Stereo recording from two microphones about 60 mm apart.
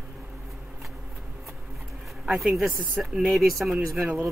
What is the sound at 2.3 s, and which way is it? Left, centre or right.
Speech, centre.